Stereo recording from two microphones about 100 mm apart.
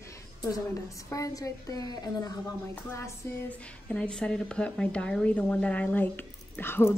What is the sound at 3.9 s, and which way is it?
A woman's voice, 10° left (ahead or behind).